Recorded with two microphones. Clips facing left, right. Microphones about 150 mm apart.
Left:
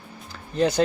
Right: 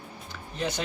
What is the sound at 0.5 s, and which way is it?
Speech, 35° left (ahead or behind).